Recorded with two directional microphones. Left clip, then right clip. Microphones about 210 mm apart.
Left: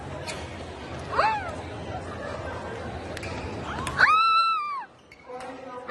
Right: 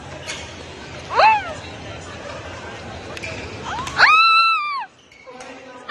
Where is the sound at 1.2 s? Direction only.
10° right (ahead or behind).